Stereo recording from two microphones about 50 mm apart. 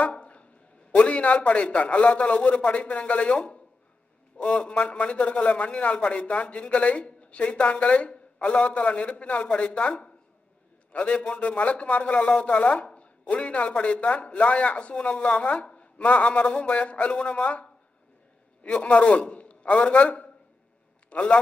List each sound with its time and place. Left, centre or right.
0.1 s dog: left
0.9 s a man's voice: left